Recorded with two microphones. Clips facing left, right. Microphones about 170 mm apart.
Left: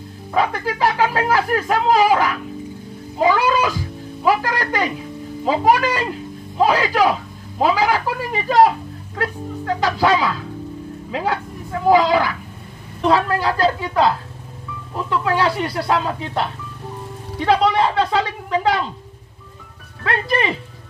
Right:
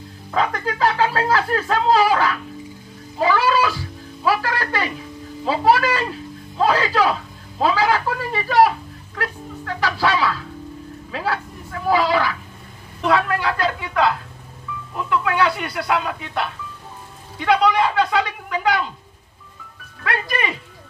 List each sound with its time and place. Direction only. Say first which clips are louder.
0.3 s a man's voice: left 2 dB; 10° left (ahead or behind)
13.0 s speech: left 2 dB; 30° left (ahead or behind)
20.0 s speech: left 4 dB; 30° left (ahead or behind)